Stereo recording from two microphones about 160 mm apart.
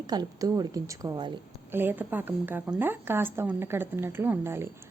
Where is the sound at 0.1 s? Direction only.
25° right (ahead or behind).